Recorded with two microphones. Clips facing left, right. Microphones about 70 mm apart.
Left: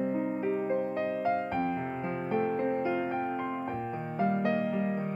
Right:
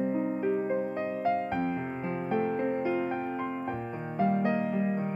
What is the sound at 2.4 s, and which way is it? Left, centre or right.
Music, right.